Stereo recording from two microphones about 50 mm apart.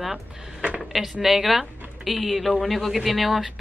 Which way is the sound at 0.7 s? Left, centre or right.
Centre.